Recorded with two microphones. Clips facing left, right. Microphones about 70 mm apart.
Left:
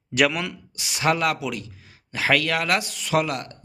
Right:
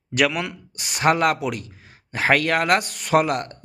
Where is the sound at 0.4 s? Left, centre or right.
Right.